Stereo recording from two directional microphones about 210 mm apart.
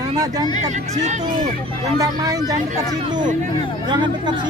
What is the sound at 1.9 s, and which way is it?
Speech, 15° right (ahead or behind).